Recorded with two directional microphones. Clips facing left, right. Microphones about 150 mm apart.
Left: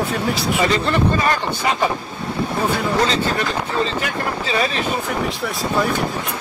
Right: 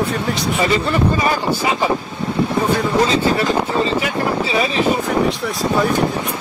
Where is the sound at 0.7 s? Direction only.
5° right (ahead or behind).